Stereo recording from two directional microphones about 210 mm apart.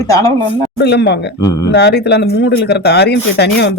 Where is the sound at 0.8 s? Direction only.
55° left (ahead or behind).